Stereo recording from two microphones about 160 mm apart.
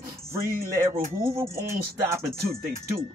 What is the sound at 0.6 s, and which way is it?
Speech, 15° right (ahead or behind).